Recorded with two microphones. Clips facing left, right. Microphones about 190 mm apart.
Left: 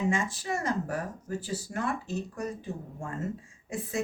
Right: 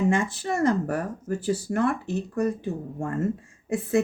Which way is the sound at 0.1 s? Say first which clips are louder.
Right 5 dB; 55° right (ahead or behind).